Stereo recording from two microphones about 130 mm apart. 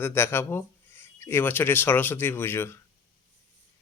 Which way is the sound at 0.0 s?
20° left (ahead or behind).